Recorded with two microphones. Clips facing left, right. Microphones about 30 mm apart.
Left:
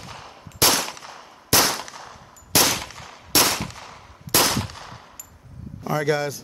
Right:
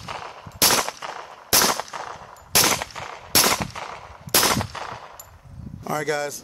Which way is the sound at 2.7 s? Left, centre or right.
Right.